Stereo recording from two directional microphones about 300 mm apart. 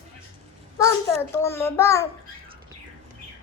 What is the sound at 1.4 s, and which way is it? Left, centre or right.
Speech, centre.